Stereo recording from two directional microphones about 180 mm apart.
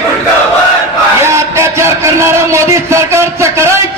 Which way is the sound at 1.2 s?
15° right (ahead or behind).